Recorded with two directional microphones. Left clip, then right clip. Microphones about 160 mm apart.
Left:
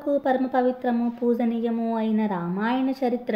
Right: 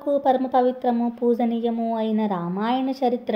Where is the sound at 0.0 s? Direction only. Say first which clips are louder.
Right 3 dB; 30° right (ahead or behind).